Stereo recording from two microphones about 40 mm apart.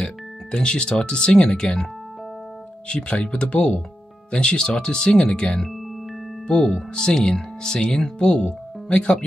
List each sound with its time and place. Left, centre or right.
0.0 s speech: left
2.9 s speech: left